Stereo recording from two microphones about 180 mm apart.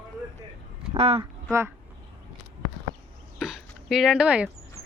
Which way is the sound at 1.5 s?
15° right (ahead or behind).